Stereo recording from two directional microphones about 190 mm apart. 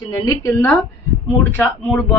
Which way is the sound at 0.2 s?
15° left (ahead or behind).